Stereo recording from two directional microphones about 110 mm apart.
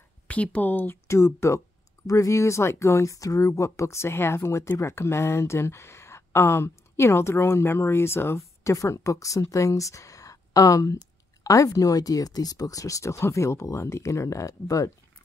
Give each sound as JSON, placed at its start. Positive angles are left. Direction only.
{"t": 0.3, "sound": "speech", "side_deg": 10}